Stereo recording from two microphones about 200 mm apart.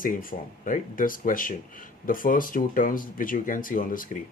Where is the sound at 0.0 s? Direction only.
45° left (ahead or behind).